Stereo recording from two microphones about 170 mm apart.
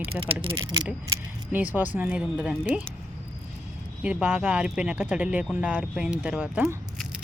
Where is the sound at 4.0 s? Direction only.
5° right (ahead or behind).